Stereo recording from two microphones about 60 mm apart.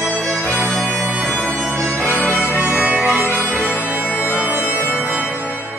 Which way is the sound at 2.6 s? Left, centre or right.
Right.